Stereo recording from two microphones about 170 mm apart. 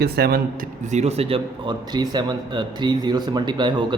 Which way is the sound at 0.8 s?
45° right (ahead or behind).